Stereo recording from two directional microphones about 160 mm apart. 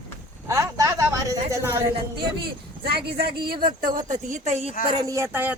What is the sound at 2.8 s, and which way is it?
Speech, 70° right (ahead or behind).